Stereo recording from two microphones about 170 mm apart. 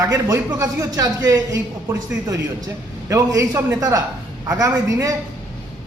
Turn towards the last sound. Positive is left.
turn(degrees=-20)  # may be behind; listen again after turning